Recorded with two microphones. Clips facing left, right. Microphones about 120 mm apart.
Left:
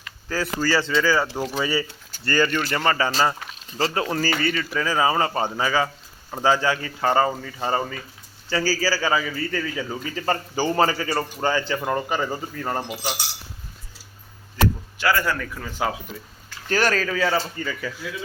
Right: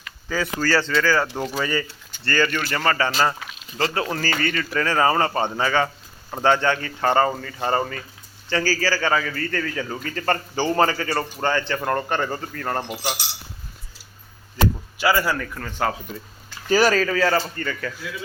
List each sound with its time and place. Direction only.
0.3 s a man's voice: 5° left (ahead or behind)
4.1 s a man's voice: 15° left (ahead or behind)
14.9 s speech: 10° right (ahead or behind)
15.5 s a man's voice: 10° left (ahead or behind)
16.6 s speech: 5° right (ahead or behind)